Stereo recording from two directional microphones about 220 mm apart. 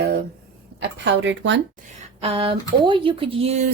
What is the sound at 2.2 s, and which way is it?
Speech, 25° right (ahead or behind).